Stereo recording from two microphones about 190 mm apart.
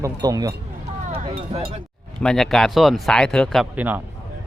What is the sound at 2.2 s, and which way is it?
Speech, centre (ahead or behind).